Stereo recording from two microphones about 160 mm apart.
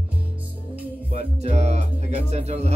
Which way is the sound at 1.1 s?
45° right (ahead or behind).